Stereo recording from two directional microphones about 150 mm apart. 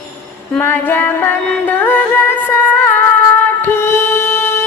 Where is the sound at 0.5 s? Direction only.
10° left (ahead or behind).